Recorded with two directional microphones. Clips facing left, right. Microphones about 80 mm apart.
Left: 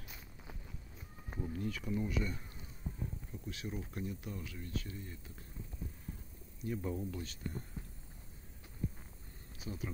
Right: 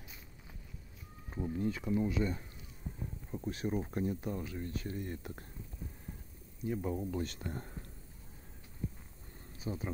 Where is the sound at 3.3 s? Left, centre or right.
Right.